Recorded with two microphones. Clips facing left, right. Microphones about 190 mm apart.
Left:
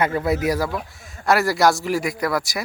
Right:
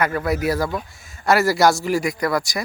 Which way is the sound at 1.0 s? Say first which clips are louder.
Right 2 dB; centre (ahead or behind).